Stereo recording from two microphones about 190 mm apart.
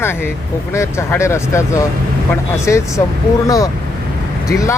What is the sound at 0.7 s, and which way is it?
Speech, 15° left (ahead or behind).